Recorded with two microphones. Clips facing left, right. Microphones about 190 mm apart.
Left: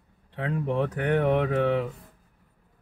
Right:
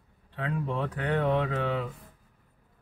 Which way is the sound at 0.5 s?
20° left (ahead or behind).